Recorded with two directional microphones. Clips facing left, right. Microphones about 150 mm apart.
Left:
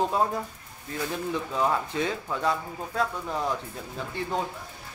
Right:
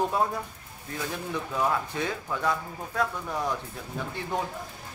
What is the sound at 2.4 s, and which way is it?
Speech, 20° left (ahead or behind).